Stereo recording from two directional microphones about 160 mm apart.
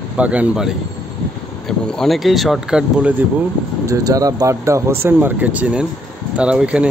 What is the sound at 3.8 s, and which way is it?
Speech, 20° right (ahead or behind).